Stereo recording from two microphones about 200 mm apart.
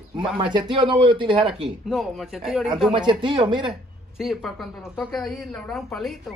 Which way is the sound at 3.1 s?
25° right (ahead or behind).